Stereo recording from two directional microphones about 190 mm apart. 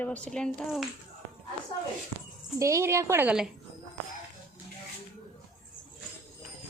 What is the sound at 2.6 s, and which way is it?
Speech, 15° right (ahead or behind).